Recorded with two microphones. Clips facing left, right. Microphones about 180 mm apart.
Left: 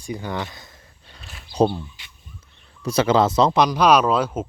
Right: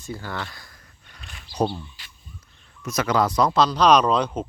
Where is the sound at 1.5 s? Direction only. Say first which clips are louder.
Left 5 dB; 25° left (ahead or behind).